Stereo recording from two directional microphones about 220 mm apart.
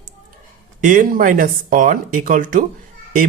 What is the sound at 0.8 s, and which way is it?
Speech, 35° right (ahead or behind).